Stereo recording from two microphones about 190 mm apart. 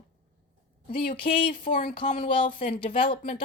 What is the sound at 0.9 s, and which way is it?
A woman's voice, 50° left (ahead or behind).